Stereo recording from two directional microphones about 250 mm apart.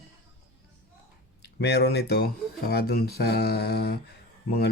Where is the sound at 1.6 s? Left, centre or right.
Left.